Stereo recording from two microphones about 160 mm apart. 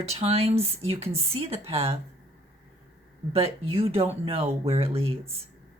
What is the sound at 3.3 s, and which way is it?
Speech, 40° right (ahead or behind).